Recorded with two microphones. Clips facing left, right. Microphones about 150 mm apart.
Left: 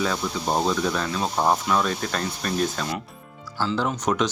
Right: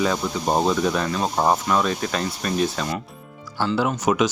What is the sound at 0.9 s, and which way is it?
Speech, 5° right (ahead or behind).